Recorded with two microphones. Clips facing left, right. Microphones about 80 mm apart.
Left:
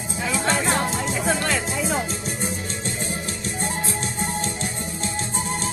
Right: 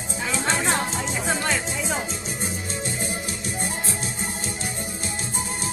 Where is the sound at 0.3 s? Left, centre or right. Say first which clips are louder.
Left 2 dB; centre.